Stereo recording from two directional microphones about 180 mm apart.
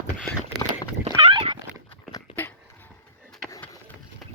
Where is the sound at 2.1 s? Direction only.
10° left (ahead or behind).